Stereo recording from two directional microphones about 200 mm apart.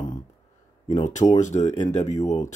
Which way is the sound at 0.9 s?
40° left (ahead or behind).